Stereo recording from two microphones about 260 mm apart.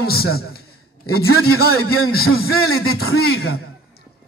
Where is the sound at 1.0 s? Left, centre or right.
Left.